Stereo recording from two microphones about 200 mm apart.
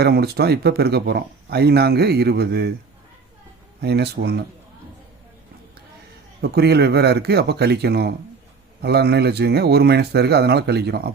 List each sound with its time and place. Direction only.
0.0 s speech: 55° right (ahead or behind)
3.8 s speech: 55° right (ahead or behind)
6.4 s speech: 55° right (ahead or behind)